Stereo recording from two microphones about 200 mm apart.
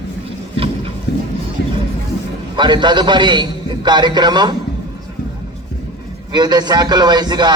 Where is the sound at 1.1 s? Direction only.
55° left (ahead or behind).